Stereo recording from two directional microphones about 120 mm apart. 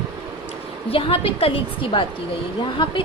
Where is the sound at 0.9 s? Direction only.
50° left (ahead or behind).